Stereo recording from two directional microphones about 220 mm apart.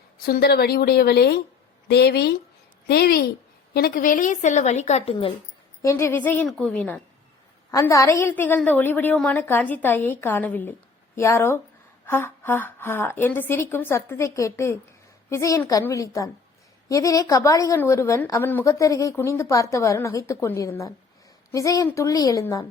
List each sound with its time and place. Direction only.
0.3 s a woman's voice: 45° left (ahead or behind); by 5.3 s 25° left (ahead or behind)
5.8 s a woman's voice: 10° left (ahead or behind)